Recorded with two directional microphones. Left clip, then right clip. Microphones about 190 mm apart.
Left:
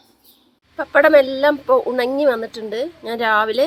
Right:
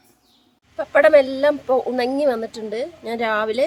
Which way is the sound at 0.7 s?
5° right (ahead or behind).